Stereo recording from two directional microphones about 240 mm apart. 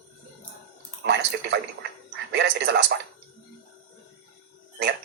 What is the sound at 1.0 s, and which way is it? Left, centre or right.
A man's voice, right.